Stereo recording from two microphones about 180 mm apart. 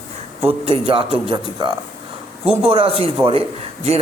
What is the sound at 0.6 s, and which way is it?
A man's voice, 30° right (ahead or behind).